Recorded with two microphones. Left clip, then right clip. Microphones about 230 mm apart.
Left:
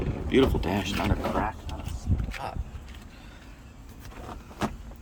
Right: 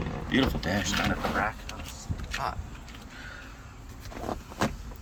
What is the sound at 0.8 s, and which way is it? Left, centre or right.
Speech, left.